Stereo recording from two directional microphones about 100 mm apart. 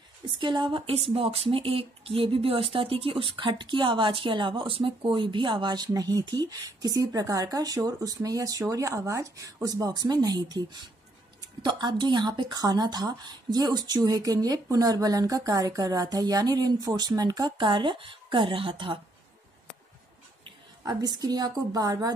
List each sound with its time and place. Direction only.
0.4 s speech: 55° right (ahead or behind)
21.0 s speech: 40° right (ahead or behind)